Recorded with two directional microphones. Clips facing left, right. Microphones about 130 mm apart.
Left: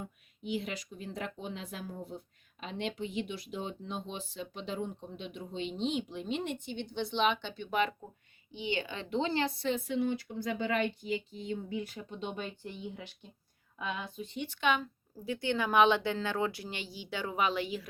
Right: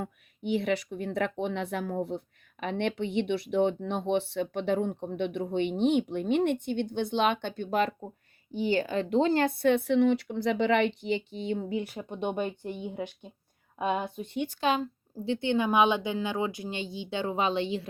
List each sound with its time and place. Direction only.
0.0 s speech: 65° right (ahead or behind); by 17.8 s 25° right (ahead or behind)